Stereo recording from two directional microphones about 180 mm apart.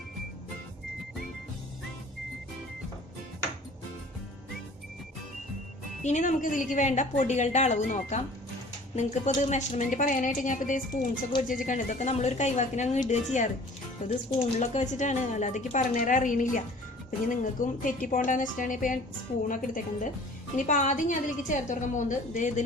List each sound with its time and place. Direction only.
6.0 s a woman's voice: 40° left (ahead or behind)